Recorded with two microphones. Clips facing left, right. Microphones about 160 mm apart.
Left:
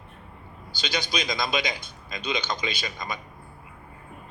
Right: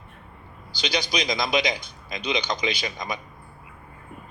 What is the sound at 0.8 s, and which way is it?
Speech, 15° right (ahead or behind).